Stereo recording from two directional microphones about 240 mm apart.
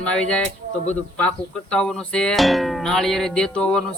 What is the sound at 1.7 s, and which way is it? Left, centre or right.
Speech, centre.